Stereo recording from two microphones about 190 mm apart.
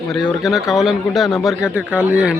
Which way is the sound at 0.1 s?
Centre (ahead or behind).